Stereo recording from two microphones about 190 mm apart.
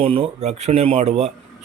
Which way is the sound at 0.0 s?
30° right (ahead or behind).